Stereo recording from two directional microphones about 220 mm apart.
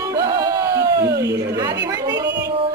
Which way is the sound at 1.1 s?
50° right (ahead or behind).